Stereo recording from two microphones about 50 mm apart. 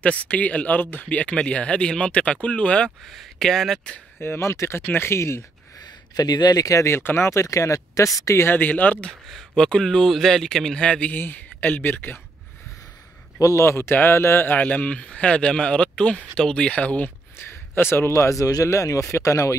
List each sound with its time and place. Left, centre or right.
0.0 s speech: left
3.1 s speech: centre
4.4 s speech: left
6.7 s speech: left
7.0 s speech: left
8.5 s speech: left
9.6 s speech: centre
11.1 s speech: left
13.5 s speech: left
14.6 s speech: left
17.5 s speech: left
18.1 s speech: left
19.0 s speech: left